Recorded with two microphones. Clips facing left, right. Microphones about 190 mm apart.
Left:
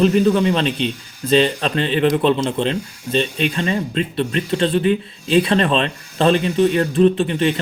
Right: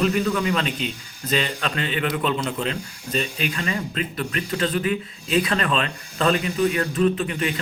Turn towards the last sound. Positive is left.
turn(degrees=30)  # may be behind; listen again after turning